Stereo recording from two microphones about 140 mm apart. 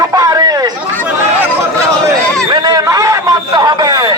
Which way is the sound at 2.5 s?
25° right (ahead or behind).